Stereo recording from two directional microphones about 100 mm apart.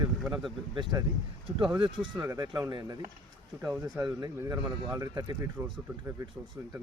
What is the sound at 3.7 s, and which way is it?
Speech, 40° right (ahead or behind).